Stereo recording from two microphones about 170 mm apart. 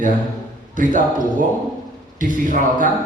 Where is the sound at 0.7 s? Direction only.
50° right (ahead or behind).